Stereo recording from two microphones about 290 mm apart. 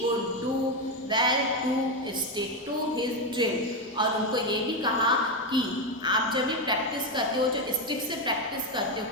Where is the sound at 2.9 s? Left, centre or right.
Centre.